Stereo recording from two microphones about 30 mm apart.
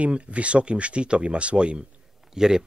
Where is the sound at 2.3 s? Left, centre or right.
Centre.